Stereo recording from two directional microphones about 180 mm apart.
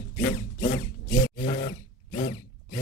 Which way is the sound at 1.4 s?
55° left (ahead or behind).